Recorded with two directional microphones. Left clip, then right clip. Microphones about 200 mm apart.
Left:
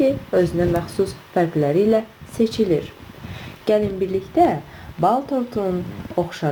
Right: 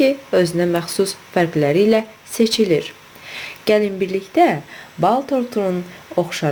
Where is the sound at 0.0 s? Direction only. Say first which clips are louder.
Right 2 dB; 20° right (ahead or behind).